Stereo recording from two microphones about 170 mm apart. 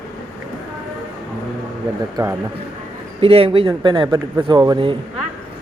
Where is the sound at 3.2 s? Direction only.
35° right (ahead or behind).